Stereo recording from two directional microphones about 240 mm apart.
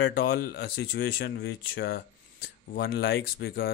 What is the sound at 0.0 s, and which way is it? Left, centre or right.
Speech, left.